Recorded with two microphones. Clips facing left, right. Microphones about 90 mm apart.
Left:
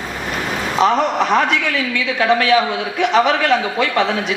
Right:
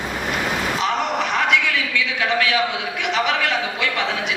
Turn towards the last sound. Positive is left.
turn(degrees=35)  # may be behind; listen again after turning